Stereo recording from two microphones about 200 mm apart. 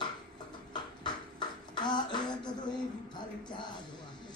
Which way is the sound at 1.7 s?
20° left (ahead or behind).